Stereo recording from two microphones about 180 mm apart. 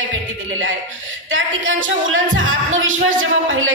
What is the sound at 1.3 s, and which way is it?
Speech, 90° right.